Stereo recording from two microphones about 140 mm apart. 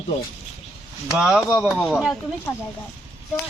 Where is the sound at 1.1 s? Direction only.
5° right (ahead or behind).